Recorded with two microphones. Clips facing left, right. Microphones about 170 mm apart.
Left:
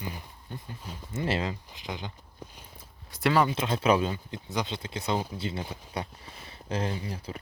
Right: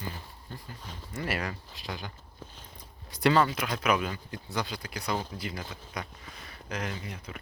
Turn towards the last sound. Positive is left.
turn(degrees=30)  # may be behind; listen again after turning